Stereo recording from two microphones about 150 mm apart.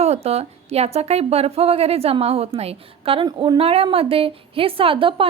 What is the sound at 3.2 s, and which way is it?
Speech, 25° right (ahead or behind).